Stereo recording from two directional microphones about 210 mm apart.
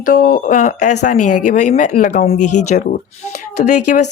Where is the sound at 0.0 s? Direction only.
40° left (ahead or behind).